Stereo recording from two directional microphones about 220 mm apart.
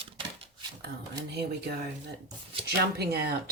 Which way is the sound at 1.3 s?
50° right (ahead or behind).